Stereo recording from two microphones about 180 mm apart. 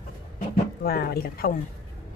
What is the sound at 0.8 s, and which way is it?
Speech, 60° left (ahead or behind).